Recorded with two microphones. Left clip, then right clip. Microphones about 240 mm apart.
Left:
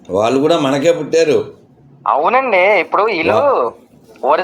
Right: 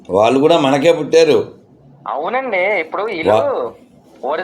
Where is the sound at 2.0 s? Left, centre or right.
Centre.